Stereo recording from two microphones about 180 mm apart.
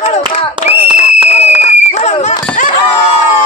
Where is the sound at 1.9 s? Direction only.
40° left (ahead or behind).